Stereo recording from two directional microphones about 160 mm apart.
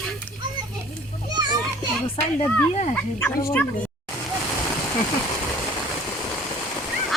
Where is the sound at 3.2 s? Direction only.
15° left (ahead or behind).